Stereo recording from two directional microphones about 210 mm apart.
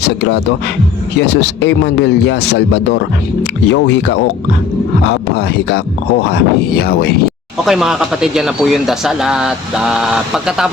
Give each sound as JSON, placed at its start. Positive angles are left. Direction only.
{"t": 0.0, "sound": "speech", "side_deg": 55}
{"t": 7.6, "sound": "speech", "side_deg": 0}